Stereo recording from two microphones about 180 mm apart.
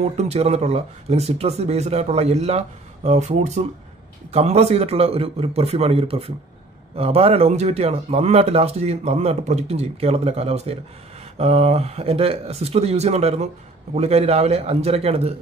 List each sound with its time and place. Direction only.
0.2 s speech: 35° right (ahead or behind)